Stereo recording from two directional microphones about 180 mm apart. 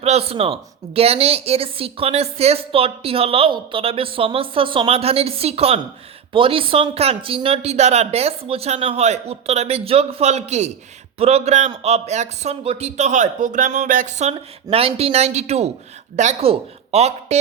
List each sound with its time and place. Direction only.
0.0 s a woman's voice: 35° right (ahead or behind)